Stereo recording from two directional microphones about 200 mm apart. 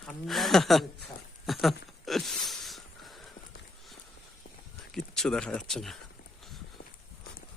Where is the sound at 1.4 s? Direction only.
Centre (ahead or behind).